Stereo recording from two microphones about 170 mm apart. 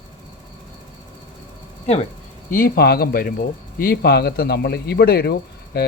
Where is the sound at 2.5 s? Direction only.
60° left (ahead or behind).